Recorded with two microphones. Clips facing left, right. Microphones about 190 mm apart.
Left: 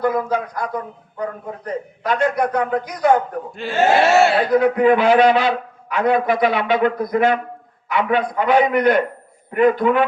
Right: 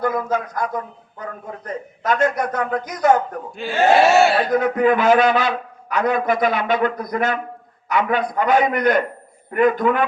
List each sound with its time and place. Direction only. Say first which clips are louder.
0.0 s a man's voice: left 2 dB; 45° right (ahead or behind)
3.5 s speech: right 1 dB; centre (ahead or behind)
4.5 s a man's voice: left 3 dB; 45° right (ahead or behind)